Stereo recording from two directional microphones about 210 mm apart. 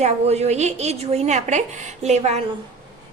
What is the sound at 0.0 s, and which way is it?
A woman's voice, 30° right (ahead or behind).